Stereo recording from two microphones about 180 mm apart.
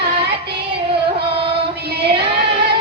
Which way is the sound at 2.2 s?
30° right (ahead or behind).